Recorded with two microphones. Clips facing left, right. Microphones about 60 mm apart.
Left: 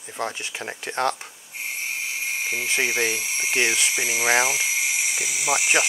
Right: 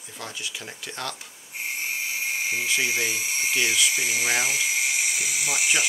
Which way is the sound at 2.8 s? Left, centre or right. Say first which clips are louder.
Left 2 dB; centre.